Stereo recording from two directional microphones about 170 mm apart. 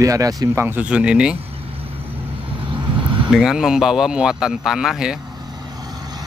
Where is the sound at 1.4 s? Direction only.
35° right (ahead or behind).